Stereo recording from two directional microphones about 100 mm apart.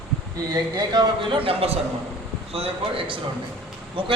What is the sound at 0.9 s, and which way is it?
Speech, 45° right (ahead or behind).